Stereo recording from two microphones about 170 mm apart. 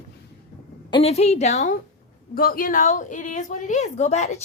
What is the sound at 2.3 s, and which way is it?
A woman's voice, 60° left (ahead or behind).